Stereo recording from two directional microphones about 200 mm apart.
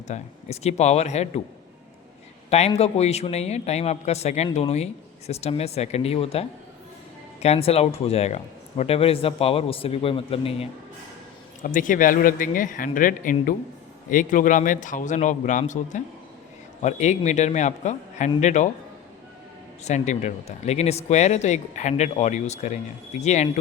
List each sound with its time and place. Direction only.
0.1 s speech: 35° left (ahead or behind)
2.5 s speech: 30° left (ahead or behind)
7.4 s a man's voice: 30° left (ahead or behind)
11.6 s speech: 40° left (ahead or behind)
19.8 s speech: 35° left (ahead or behind)